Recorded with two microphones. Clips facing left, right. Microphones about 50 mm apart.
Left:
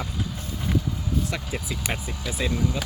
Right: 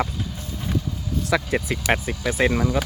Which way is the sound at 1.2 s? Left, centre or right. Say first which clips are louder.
Right 8 dB; right.